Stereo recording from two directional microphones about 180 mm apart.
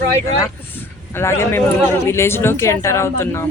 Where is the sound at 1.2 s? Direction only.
15° left (ahead or behind).